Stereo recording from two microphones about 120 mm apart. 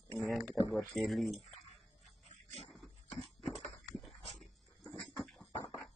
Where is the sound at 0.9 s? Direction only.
Centre (ahead or behind).